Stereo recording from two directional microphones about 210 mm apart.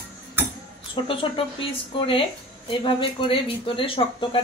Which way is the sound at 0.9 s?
25° left (ahead or behind).